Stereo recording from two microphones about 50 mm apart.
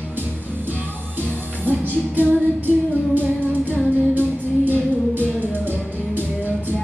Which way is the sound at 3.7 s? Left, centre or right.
Right.